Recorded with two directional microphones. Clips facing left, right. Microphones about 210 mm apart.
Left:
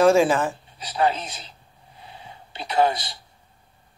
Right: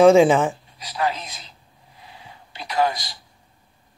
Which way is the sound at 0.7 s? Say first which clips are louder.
Left 5 dB; 30° left (ahead or behind).